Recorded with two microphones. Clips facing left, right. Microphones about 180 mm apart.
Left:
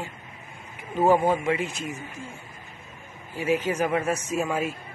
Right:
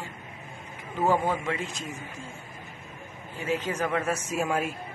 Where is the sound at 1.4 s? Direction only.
10° left (ahead or behind).